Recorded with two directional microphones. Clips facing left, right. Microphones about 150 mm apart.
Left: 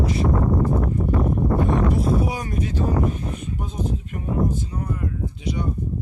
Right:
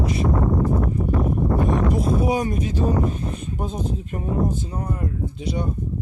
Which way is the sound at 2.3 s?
20° right (ahead or behind).